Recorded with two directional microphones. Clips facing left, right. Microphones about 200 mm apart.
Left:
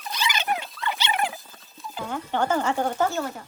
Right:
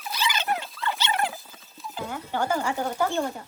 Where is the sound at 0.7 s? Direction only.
Centre (ahead or behind).